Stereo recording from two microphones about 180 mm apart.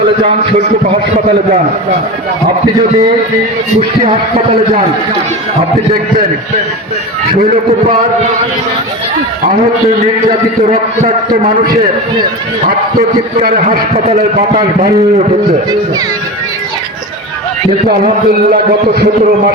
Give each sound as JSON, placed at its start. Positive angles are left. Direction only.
{"t": 0.2, "sound": "a man's voice", "side_deg": -45}
{"t": 10.7, "sound": "a man's voice", "side_deg": -40}
{"t": 13.9, "sound": "a man's voice", "side_deg": -45}
{"t": 17.8, "sound": "a man's voice", "side_deg": -55}